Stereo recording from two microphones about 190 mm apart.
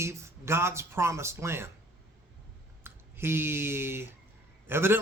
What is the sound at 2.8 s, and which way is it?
A man's voice, 10° right (ahead or behind).